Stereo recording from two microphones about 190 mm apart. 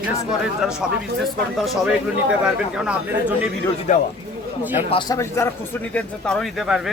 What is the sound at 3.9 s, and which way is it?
Speech, 40° left (ahead or behind).